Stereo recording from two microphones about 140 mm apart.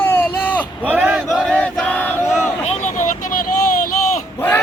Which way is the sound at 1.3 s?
5° left (ahead or behind).